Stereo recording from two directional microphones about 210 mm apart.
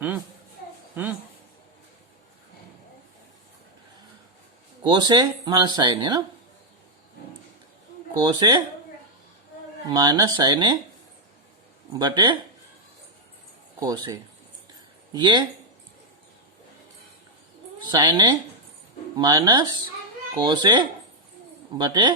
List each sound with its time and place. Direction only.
4.8 s speech: 20° right (ahead or behind)
8.1 s speech: 20° right (ahead or behind)
9.8 s speech: 20° right (ahead or behind)
11.9 s speech: 20° right (ahead or behind)
13.7 s speech: 20° right (ahead or behind)
17.8 s speech: 20° right (ahead or behind)